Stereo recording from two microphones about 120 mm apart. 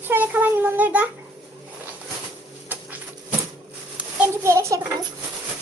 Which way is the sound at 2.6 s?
15° right (ahead or behind).